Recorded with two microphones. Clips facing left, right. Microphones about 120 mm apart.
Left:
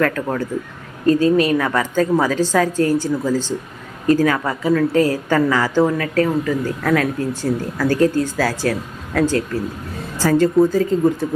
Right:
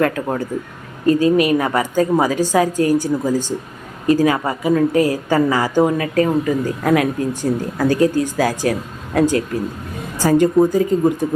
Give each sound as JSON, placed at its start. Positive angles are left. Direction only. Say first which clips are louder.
{"t": 0.0, "sound": "a woman's voice", "louder": "right 1 dB", "side_deg": -15}
{"t": 7.8, "sound": "a woman's voice", "louder": "right 1 dB", "side_deg": -15}